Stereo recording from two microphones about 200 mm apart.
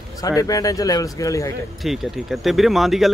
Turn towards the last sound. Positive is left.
turn(degrees=0)  # may be behind; listen again after turning